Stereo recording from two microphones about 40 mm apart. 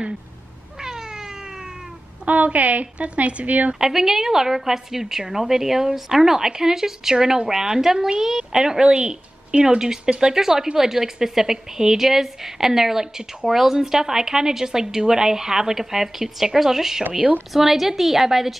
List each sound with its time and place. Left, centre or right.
2.2 s speech: right
3.8 s a woman's voice: centre